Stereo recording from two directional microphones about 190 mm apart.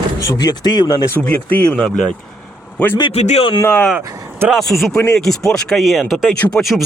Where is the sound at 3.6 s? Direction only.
10° left (ahead or behind).